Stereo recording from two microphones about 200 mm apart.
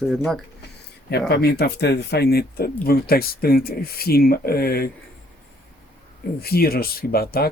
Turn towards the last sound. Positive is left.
turn(degrees=50)  # may be behind; listen again after turning